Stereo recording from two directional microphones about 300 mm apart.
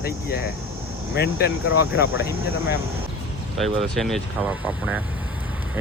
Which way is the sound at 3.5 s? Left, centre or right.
Centre.